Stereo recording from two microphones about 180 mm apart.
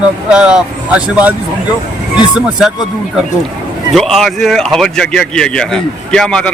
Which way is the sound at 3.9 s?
Centre (ahead or behind).